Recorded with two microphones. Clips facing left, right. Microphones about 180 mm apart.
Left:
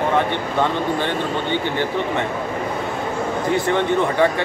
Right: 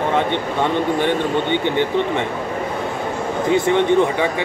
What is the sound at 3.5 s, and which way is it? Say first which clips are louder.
Speech: right 5 dB; 20° right (ahead or behind).